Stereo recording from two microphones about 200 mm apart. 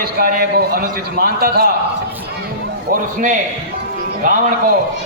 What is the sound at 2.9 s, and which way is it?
Speech, 45° right (ahead or behind).